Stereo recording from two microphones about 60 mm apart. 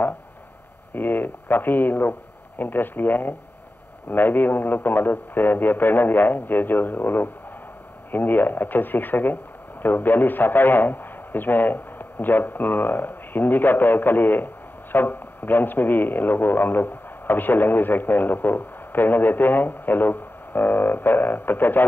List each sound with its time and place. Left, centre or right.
0.9 s speech: left